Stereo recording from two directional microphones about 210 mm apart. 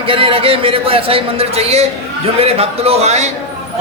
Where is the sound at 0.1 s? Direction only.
25° right (ahead or behind).